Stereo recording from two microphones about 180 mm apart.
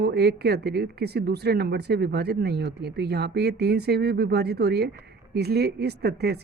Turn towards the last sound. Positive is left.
turn(degrees=-65)  # may be behind; listen again after turning